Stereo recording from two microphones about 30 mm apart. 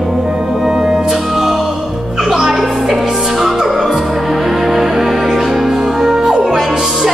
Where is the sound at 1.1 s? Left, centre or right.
Centre.